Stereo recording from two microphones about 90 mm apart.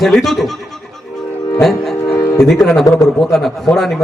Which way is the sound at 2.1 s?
35° left (ahead or behind).